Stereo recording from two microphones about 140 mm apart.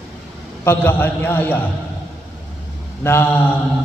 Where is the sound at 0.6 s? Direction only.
15° left (ahead or behind).